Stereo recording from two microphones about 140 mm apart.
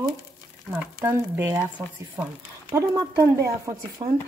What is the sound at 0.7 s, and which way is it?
Speech, 15° right (ahead or behind).